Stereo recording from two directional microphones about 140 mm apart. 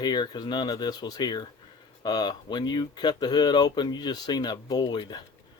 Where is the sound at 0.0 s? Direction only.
30° left (ahead or behind).